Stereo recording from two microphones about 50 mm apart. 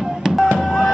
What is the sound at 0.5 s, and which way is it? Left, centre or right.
Music, centre.